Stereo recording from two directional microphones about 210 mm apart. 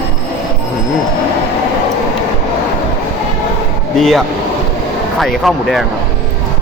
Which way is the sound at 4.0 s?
Centre (ahead or behind).